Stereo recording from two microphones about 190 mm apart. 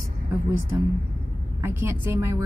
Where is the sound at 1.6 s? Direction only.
15° right (ahead or behind).